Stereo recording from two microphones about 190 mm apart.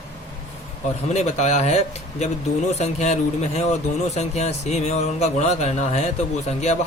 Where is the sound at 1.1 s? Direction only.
35° left (ahead or behind).